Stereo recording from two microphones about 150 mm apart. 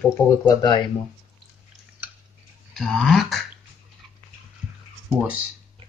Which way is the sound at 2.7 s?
Centre (ahead or behind).